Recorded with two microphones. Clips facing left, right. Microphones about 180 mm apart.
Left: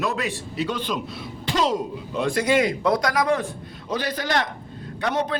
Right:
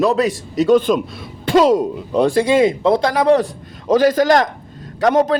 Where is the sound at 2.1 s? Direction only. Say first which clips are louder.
Right 7 dB; 30° right (ahead or behind).